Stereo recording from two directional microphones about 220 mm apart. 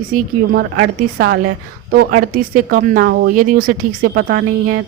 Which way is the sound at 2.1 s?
40° right (ahead or behind).